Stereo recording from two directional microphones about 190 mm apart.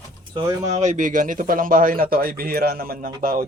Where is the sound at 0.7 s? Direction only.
40° right (ahead or behind).